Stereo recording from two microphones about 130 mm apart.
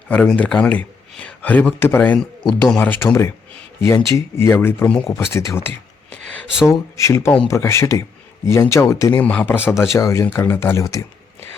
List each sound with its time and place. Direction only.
0.1 s a man's voice: 10° left (ahead or behind)
9.2 s speech: 15° left (ahead or behind)